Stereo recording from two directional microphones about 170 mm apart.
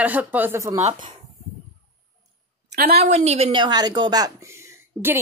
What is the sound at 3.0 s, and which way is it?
A woman's voice, 40° right (ahead or behind).